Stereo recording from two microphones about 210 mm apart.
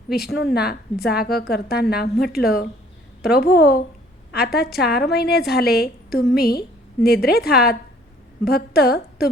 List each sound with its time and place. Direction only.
0.1 s a woman's voice: 50° left (ahead or behind)